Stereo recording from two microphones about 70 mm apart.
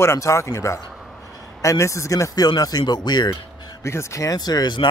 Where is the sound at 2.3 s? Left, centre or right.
Left.